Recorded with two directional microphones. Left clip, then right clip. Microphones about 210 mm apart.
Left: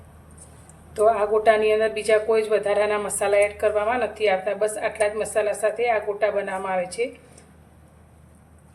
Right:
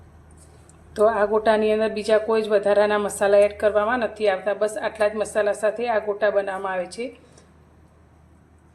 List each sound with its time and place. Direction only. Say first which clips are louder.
0.9 s a woman's voice: even; 25° right (ahead or behind)